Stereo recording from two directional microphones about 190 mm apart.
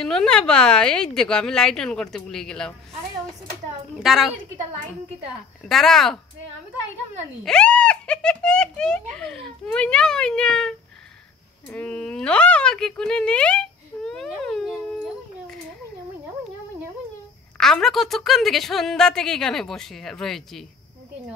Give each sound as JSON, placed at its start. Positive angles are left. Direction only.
{"t": 0.0, "sound": "a woman's voice", "side_deg": 5}
{"t": 4.0, "sound": "a woman's voice", "side_deg": 0}
{"t": 5.7, "sound": "a woman's voice", "side_deg": 0}
{"t": 7.4, "sound": "a woman's voice", "side_deg": 5}
{"t": 17.6, "sound": "a woman's voice", "side_deg": 0}